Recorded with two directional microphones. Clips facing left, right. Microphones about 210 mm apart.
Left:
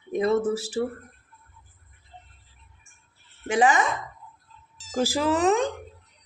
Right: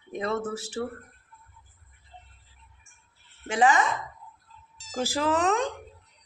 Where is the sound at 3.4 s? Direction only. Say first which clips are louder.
Left 2 dB; 15° left (ahead or behind).